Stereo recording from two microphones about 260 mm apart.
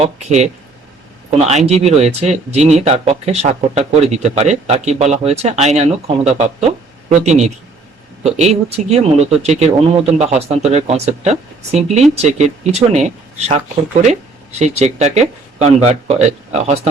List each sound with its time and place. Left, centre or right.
0.0 s speech: right
14.8 s speech: right